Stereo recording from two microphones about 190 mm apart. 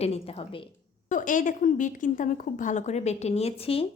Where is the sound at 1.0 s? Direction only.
40° left (ahead or behind).